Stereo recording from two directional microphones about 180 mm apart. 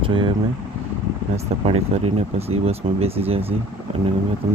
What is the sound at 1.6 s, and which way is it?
Speech, 35° right (ahead or behind).